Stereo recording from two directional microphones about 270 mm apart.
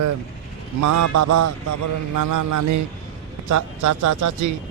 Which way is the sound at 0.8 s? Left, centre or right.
Right.